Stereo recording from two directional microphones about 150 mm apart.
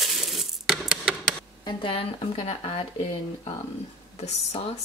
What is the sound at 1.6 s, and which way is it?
Speech, 35° left (ahead or behind).